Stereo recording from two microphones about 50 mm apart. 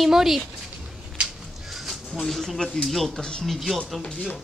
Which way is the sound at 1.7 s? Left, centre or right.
Centre.